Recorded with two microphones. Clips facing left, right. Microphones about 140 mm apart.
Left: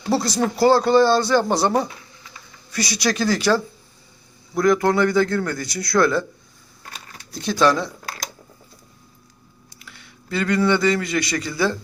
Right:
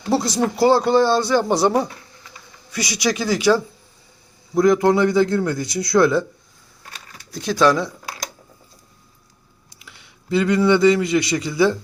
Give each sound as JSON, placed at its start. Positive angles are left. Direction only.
{"t": 0.1, "sound": "a man's voice", "side_deg": -20}
{"t": 4.5, "sound": "a man's voice", "side_deg": -20}
{"t": 7.3, "sound": "speech", "side_deg": -5}
{"t": 9.8, "sound": "a sound", "side_deg": -20}
{"t": 10.7, "sound": "a man's voice", "side_deg": -20}